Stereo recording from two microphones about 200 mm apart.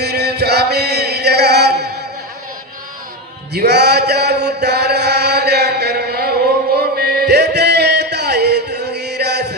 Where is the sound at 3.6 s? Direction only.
55° right (ahead or behind).